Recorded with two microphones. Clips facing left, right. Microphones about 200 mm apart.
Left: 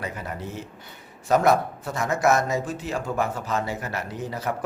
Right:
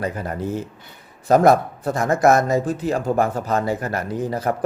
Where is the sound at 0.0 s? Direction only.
45° right (ahead or behind).